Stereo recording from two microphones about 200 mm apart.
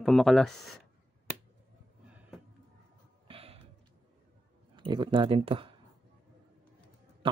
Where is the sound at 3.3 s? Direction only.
30° right (ahead or behind).